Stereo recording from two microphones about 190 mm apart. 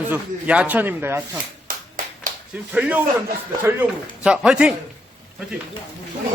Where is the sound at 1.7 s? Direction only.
45° right (ahead or behind).